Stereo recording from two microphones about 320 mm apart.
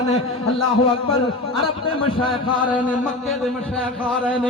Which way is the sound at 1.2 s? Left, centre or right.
Centre.